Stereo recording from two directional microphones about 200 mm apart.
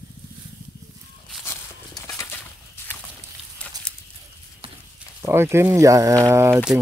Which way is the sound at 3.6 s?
5° left (ahead or behind).